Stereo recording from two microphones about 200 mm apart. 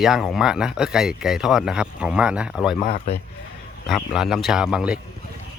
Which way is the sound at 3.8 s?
Centre (ahead or behind).